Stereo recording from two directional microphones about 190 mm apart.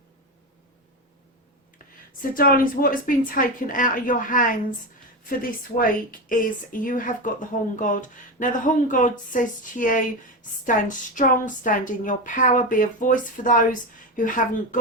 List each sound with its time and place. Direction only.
2.3 s a woman's voice: 50° left (ahead or behind)